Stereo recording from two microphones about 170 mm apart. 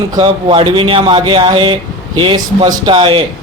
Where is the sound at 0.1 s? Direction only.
30° right (ahead or behind).